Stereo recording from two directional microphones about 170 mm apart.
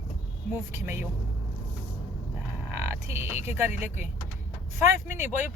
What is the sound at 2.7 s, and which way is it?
Speech, 15° right (ahead or behind).